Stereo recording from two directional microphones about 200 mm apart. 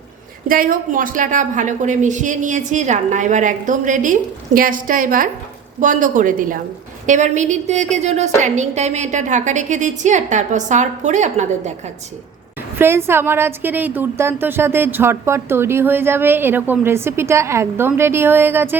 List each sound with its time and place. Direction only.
0.4 s a woman's voice: 45° right (ahead or behind)
12.8 s a woman's voice: 10° right (ahead or behind)